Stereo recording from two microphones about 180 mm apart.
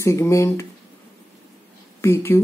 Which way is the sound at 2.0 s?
15° left (ahead or behind).